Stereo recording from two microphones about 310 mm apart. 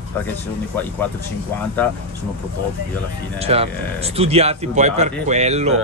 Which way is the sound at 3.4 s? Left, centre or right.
Centre.